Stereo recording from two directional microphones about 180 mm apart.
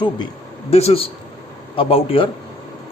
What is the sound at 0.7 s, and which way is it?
A man's voice, 35° left (ahead or behind).